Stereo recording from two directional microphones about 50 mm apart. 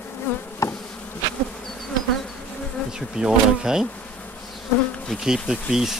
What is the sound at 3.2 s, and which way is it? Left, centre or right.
Speech, centre.